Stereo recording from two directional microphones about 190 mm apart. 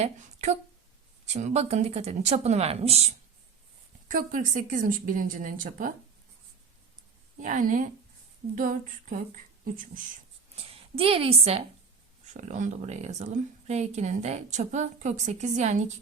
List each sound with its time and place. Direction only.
1.3 s speech: 35° right (ahead or behind)
4.1 s speech: 45° right (ahead or behind)
7.4 s speech: 40° right (ahead or behind)
10.5 s a woman's voice: 30° right (ahead or behind)